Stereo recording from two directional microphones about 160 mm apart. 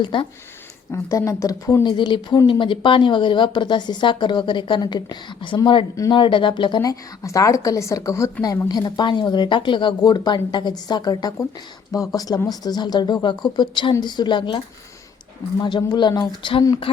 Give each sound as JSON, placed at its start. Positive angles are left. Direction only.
{"t": 0.0, "sound": "speech", "side_deg": 30}
{"t": 0.9, "sound": "speech", "side_deg": 20}
{"t": 15.6, "sound": "speech", "side_deg": 30}